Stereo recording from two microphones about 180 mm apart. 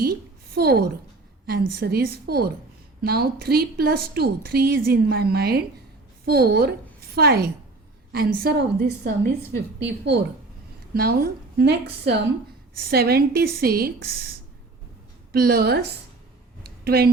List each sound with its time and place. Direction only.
0.5 s a woman's voice: 60° right (ahead or behind)
15.3 s a woman's voice: 60° right (ahead or behind)
16.6 s a sound: 60° right (ahead or behind)